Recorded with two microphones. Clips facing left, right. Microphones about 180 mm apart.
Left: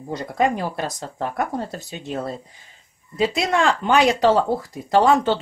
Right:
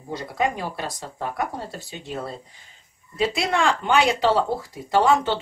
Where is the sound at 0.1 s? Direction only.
45° left (ahead or behind).